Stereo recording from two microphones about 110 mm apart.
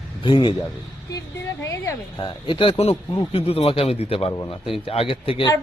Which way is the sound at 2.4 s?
50° left (ahead or behind).